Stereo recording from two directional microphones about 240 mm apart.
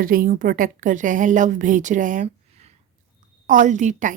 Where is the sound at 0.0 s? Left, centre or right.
Right.